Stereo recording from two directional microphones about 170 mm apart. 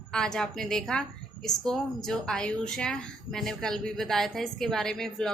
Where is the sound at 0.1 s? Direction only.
5° left (ahead or behind).